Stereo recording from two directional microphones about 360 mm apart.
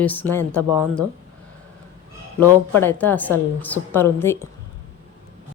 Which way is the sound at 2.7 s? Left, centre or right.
Centre.